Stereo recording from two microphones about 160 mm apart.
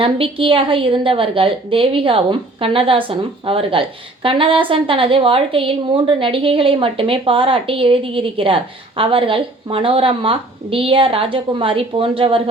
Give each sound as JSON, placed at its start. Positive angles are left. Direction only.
{"t": 0.0, "sound": "a woman's voice", "side_deg": -35}